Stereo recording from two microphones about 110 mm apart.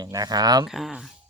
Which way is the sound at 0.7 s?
5° right (ahead or behind).